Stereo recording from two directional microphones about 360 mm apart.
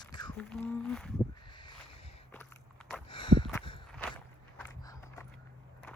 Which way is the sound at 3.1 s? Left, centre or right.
Centre.